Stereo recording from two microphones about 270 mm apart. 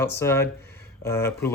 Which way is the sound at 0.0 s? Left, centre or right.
Centre.